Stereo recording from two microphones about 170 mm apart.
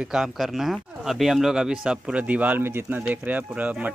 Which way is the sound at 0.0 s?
5° right (ahead or behind).